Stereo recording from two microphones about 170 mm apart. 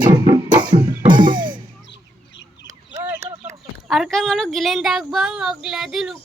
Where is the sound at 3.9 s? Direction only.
Centre (ahead or behind).